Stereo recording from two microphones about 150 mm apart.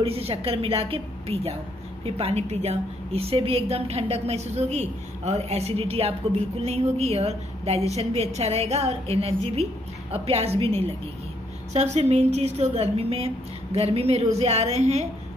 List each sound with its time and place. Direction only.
0.0 s a woman's voice: 40° right (ahead or behind)